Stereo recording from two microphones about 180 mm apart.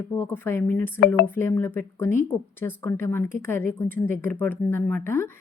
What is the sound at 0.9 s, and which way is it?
Speech, 65° left (ahead or behind).